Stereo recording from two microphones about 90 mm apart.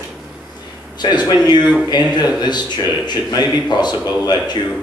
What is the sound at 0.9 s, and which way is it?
A man's voice, 50° left (ahead or behind).